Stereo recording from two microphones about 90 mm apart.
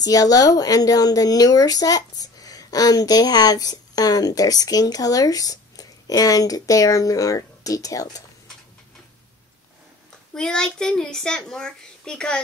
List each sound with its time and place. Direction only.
0.0 s a woman's voice: 45° left (ahead or behind)
10.3 s a child's voice: 5° left (ahead or behind)